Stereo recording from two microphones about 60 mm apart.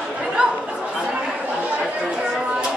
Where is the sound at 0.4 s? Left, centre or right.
Centre.